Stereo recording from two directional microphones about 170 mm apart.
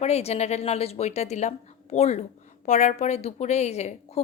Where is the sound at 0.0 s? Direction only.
40° left (ahead or behind).